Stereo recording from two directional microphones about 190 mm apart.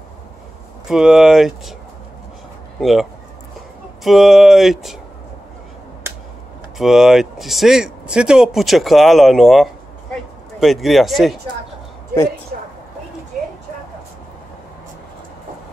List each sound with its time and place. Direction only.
0.8 s speech: centre (ahead or behind)
2.8 s speech: centre (ahead or behind)
6.8 s speech: centre (ahead or behind)
12.5 s a sound: 50° right (ahead or behind)